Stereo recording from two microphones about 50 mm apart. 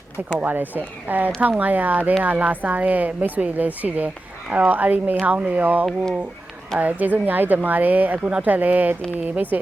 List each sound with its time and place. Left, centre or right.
0.3 s speech: right
9.5 s speech: right